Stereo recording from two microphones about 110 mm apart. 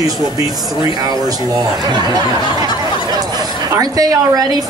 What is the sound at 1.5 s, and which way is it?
Speech, 40° right (ahead or behind).